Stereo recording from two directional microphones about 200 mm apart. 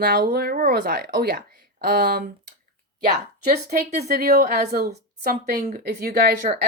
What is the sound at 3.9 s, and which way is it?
Speech, 35° right (ahead or behind).